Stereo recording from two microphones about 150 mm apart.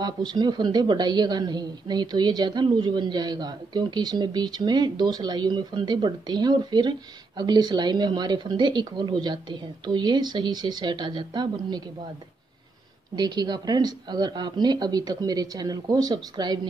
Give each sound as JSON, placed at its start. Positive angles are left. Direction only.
{"t": 0.0, "sound": "a woman's voice", "side_deg": -30}
{"t": 13.1, "sound": "a woman's voice", "side_deg": -25}